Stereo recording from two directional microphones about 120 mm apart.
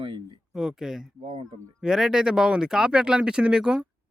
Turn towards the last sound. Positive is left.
turn(degrees=-5)  # may be behind; listen again after turning